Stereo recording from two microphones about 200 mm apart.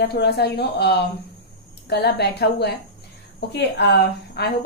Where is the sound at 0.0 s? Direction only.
55° left (ahead or behind).